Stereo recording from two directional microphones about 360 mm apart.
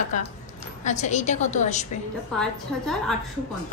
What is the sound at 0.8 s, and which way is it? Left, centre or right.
A woman's voice, centre.